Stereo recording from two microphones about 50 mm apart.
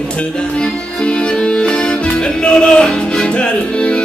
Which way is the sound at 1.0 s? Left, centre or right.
Left.